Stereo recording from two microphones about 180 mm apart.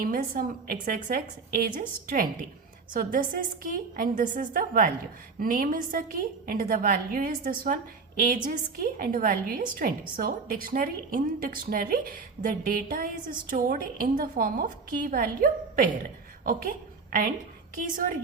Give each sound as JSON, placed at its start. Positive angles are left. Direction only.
{"t": 0.0, "sound": "a woman's voice", "side_deg": -50}
{"t": 17.1, "sound": "a woman's voice", "side_deg": -50}